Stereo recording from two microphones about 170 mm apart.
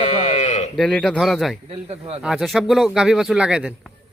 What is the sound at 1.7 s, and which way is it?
Speech, 35° right (ahead or behind).